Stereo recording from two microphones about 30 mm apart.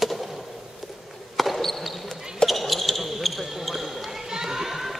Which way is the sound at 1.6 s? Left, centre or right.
Centre.